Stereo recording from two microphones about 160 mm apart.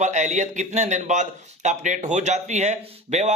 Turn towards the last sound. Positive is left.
turn(degrees=-45)  # may be behind; listen again after turning